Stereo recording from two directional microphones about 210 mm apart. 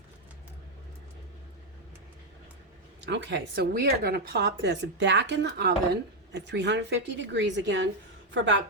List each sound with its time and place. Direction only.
3.1 s a woman's voice: 55° right (ahead or behind)